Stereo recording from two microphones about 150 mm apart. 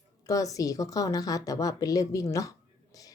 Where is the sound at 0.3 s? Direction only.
20° left (ahead or behind).